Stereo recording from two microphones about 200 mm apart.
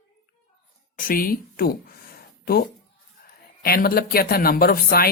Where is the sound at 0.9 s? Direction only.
45° left (ahead or behind).